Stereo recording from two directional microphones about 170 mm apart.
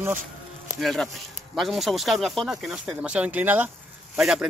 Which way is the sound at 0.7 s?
Centre (ahead or behind).